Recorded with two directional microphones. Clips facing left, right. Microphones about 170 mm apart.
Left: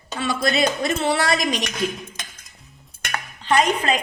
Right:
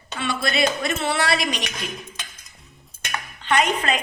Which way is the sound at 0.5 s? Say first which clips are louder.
Left 2 dB; 40° left (ahead or behind).